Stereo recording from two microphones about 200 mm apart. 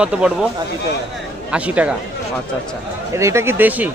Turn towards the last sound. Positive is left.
turn(degrees=-10)  # may be behind; listen again after turning